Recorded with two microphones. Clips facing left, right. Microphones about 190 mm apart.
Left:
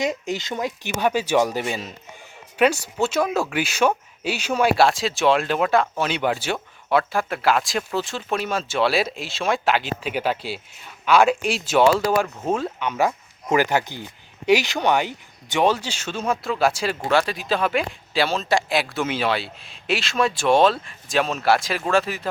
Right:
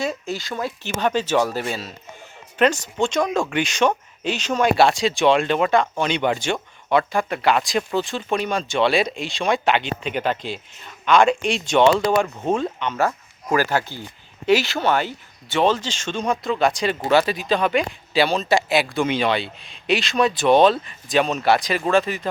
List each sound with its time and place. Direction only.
0.0 s speech: 15° left (ahead or behind)